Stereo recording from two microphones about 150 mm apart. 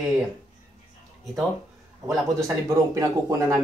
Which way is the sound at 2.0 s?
20° right (ahead or behind).